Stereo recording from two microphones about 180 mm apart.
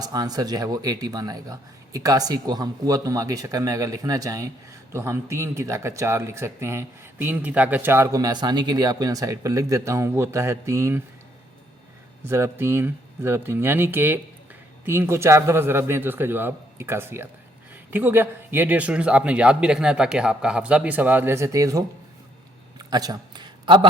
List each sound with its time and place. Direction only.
0.0 s speech: 20° right (ahead or behind)
12.2 s speech: 15° right (ahead or behind)
22.9 s a sound: 20° right (ahead or behind)